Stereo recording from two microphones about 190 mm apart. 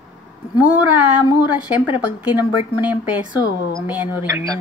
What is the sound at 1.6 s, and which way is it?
Speech, 10° right (ahead or behind).